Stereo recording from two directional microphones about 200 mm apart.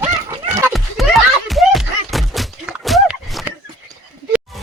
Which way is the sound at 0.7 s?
Centre (ahead or behind).